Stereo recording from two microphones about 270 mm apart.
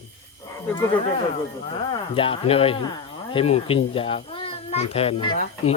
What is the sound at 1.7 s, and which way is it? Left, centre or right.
A child's voice, centre.